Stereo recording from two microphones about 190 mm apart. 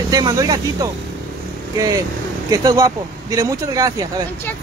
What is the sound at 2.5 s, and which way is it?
Speech, 20° right (ahead or behind).